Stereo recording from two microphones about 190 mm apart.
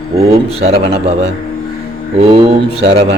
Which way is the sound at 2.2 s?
30° right (ahead or behind).